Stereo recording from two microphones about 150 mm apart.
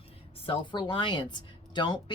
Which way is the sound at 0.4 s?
30° left (ahead or behind).